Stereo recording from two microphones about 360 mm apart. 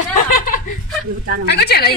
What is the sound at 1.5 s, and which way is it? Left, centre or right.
Speech, left.